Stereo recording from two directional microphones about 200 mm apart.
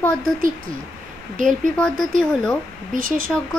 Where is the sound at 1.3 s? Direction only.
40° right (ahead or behind).